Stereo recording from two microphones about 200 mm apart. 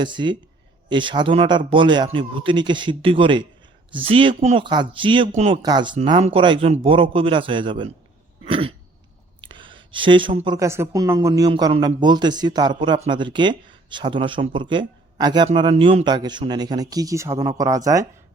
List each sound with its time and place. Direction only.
0.0 s a woman's voice: 25° right (ahead or behind)
5.6 s a woman's voice: 20° right (ahead or behind)
8.4 s throat clearing: 25° right (ahead or behind)
9.4 s a woman's voice: 25° right (ahead or behind)